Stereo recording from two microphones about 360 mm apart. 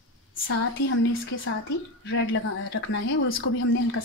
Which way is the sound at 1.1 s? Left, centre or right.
Left.